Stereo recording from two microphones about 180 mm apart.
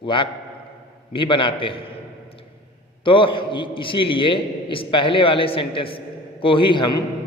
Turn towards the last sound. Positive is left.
turn(degrees=25)  # may be behind; listen again after turning